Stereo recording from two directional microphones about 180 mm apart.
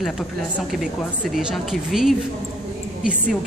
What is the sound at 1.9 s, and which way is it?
Speech, centre (ahead or behind).